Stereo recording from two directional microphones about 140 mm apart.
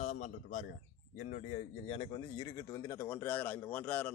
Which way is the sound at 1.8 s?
45° left (ahead or behind).